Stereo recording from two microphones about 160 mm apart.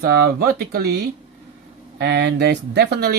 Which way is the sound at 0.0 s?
75° right (ahead or behind).